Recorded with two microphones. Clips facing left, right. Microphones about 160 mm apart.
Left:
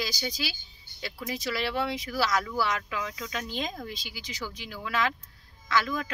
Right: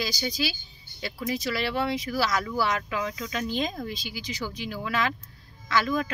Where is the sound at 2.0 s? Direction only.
5° right (ahead or behind).